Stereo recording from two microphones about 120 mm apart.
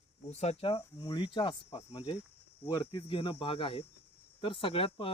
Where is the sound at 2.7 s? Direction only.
45° left (ahead or behind).